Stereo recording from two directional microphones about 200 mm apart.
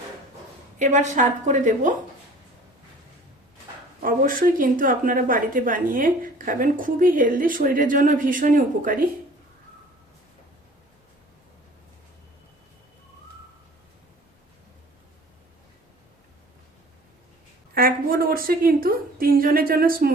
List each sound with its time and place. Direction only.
0.8 s a woman's voice: 35° right (ahead or behind)
4.0 s a woman's voice: 45° right (ahead or behind)
17.7 s a woman's voice: 45° right (ahead or behind)